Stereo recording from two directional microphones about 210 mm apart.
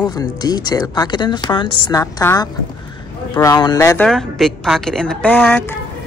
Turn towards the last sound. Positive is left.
turn(degrees=10)  # may be behind; listen again after turning